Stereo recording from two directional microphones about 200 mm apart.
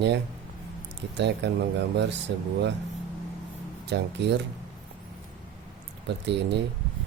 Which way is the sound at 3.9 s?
55° right (ahead or behind).